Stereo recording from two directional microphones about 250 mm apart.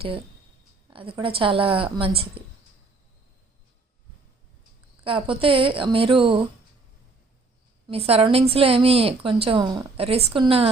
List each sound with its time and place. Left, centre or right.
0.9 s a woman's voice: centre
5.0 s a woman's voice: right
7.9 s a woman's voice: right